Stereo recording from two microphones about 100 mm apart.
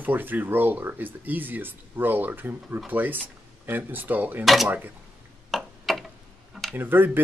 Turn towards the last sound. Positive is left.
turn(degrees=-20)  # may be behind; listen again after turning